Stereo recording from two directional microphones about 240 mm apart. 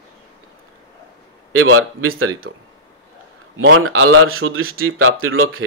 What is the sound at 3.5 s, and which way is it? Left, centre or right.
Speech, right.